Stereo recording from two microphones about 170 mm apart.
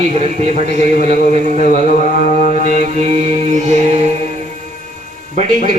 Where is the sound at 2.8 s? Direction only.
40° right (ahead or behind).